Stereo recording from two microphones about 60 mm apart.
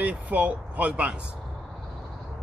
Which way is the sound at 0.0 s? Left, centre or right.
Right.